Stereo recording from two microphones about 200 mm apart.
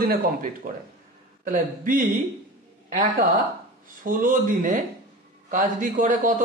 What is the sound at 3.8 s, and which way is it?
Speech, 45° right (ahead or behind).